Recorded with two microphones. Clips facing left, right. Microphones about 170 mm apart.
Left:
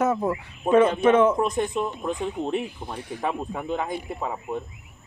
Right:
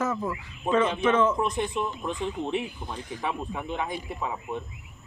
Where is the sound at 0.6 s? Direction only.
50° left (ahead or behind).